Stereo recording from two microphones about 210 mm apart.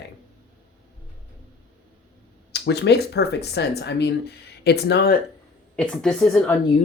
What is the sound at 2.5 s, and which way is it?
Speech, 55° left (ahead or behind).